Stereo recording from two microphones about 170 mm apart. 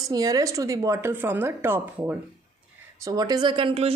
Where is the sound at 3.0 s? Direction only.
25° right (ahead or behind).